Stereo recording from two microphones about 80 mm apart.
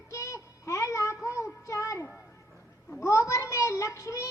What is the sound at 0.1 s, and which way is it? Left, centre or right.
Child singing, left.